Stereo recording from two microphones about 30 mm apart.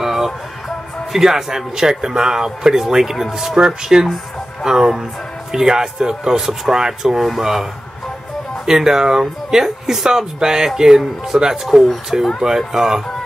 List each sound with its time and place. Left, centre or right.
0.0 s music: centre
1.1 s speech: centre
3.9 s speech: right
7.2 s speech: centre
8.6 s speech: centre